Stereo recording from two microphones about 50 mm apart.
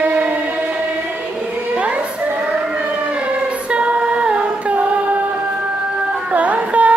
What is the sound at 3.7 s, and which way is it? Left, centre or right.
Singing, right.